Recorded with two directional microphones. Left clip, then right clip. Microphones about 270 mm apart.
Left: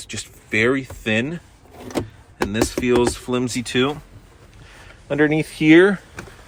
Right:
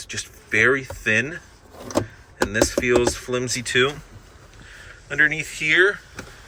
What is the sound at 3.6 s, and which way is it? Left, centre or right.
Speech, centre.